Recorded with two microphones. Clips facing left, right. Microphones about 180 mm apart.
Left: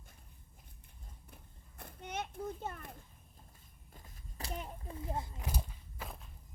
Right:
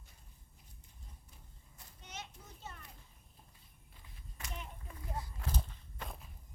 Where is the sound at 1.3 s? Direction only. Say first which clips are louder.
Left 4 dB; 60° left (ahead or behind).